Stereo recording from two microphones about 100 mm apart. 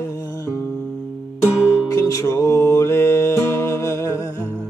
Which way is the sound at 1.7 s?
35° left (ahead or behind).